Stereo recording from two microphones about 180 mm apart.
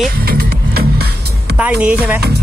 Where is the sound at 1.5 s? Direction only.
5° right (ahead or behind).